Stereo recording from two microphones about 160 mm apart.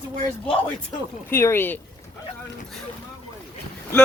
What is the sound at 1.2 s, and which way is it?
Speech, 15° left (ahead or behind).